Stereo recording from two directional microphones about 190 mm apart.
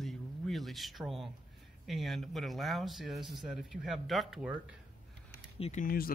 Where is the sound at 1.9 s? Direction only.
Centre (ahead or behind).